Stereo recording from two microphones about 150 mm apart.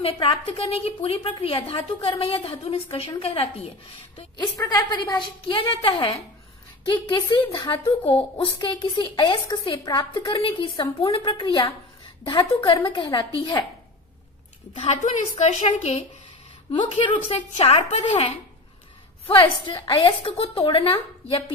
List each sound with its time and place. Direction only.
0.0 s a woman's voice: 35° left (ahead or behind)
4.4 s a woman's voice: 25° left (ahead or behind)
14.9 s a woman's voice: 50° left (ahead or behind)
16.7 s a woman's voice: 35° left (ahead or behind)
19.2 s a woman's voice: 35° left (ahead or behind)